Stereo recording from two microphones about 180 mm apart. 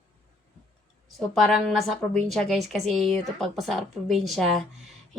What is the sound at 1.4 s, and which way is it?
Speech, centre (ahead or behind).